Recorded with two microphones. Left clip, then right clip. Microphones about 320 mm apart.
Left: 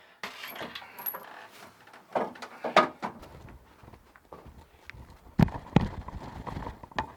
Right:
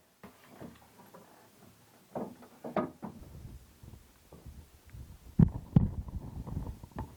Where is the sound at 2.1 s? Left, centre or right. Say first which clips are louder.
Left 10 dB; centre.